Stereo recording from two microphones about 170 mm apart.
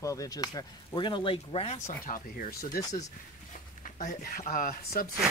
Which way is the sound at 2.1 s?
55° left (ahead or behind).